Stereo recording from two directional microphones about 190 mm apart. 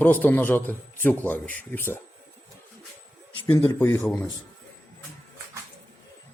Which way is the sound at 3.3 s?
20° left (ahead or behind).